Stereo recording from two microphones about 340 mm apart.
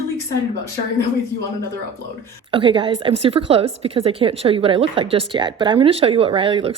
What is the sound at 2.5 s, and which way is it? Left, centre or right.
A woman's voice, centre.